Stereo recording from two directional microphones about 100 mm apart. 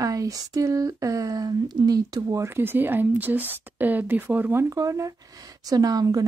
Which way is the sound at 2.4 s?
20° right (ahead or behind).